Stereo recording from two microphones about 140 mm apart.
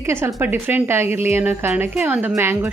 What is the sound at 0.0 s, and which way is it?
Speech, 15° right (ahead or behind).